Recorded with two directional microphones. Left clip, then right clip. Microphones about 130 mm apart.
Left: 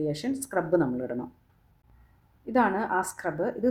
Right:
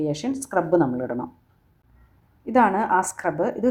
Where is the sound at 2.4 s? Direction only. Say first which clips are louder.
Right 6 dB; 15° right (ahead or behind).